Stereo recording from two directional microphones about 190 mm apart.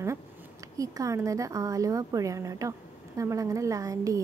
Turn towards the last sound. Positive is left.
turn(degrees=-15)  # may be behind; listen again after turning